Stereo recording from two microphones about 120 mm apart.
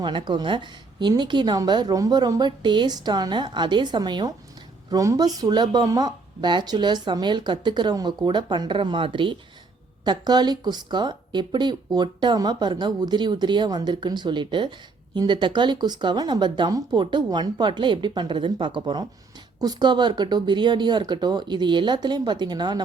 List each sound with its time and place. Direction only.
0.0 s speech: 40° right (ahead or behind)